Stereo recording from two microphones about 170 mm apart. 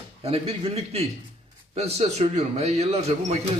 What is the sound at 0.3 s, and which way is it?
A man's voice, 35° right (ahead or behind).